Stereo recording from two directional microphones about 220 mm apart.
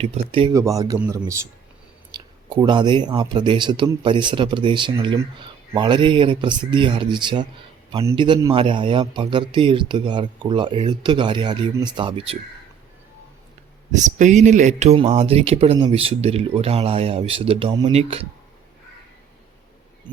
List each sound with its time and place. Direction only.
0.0 s speech: 25° right (ahead or behind)
13.9 s speech: 35° right (ahead or behind)